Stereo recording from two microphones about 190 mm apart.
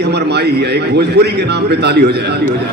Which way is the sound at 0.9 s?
60° right (ahead or behind).